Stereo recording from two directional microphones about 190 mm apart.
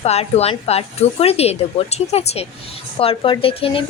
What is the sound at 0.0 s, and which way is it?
A woman's voice, 35° left (ahead or behind).